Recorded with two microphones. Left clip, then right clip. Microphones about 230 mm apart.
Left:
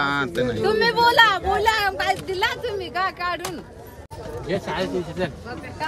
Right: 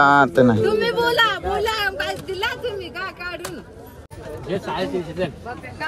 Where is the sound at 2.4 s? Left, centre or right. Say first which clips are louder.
Left 1 dB; left.